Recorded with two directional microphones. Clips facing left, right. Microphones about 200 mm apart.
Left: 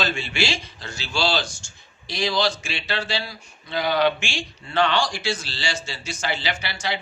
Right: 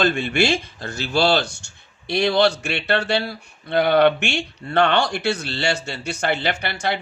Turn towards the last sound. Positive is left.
turn(degrees=-55)  # may be behind; listen again after turning